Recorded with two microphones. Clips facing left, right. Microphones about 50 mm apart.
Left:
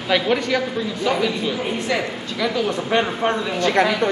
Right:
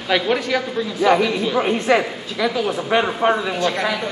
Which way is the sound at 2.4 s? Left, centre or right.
Centre.